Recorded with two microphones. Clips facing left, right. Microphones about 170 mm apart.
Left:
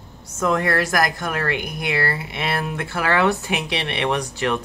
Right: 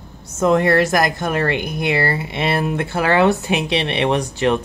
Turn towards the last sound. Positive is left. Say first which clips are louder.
# right 5 dB
turn(degrees=-25)  # may be behind; listen again after turning